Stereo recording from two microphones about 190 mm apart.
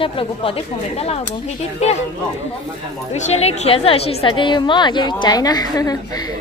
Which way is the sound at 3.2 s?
35° left (ahead or behind).